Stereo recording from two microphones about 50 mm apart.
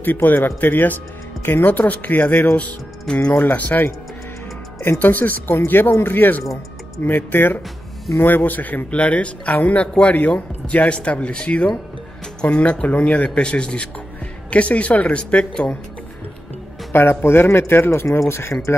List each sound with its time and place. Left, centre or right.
0.0 s speech: left
3.1 s speech: centre
3.3 s speech: left
4.8 s speech: left
16.9 s speech: left
18.3 s speech: left